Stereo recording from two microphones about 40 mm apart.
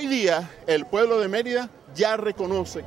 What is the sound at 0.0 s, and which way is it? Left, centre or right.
A man's voice, centre.